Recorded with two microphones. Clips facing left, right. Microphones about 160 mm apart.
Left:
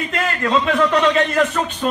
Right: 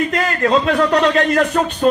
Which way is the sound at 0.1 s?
40° right (ahead or behind).